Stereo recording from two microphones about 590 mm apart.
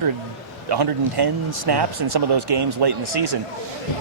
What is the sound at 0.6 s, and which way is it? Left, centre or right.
Speech, right.